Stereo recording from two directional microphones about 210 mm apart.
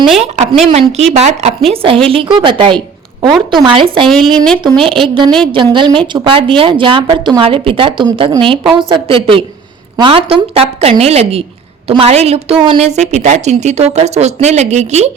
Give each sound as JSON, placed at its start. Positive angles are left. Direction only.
{"t": 0.0, "sound": "speech", "side_deg": 0}
{"t": 0.7, "sound": "a woman's voice", "side_deg": -30}
{"t": 4.4, "sound": "speech", "side_deg": 5}
{"t": 4.6, "sound": "a woman's voice", "side_deg": -25}